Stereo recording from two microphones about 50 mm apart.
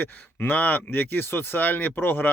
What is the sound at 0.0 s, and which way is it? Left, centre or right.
Speech, left.